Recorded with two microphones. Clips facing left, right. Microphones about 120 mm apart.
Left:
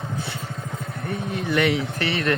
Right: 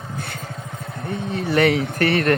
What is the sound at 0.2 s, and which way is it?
Vehicle, 50° right (ahead or behind).